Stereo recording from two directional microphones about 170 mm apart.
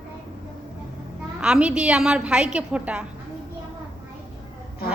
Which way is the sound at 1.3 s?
5° right (ahead or behind).